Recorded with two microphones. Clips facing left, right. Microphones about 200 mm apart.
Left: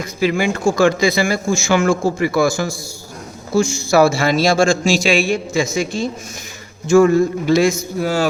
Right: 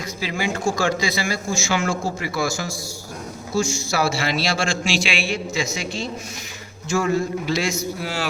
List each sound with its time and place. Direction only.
0.0 s speech: 55° left (ahead or behind)